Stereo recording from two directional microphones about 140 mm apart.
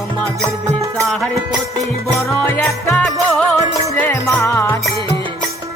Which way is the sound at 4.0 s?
15° left (ahead or behind).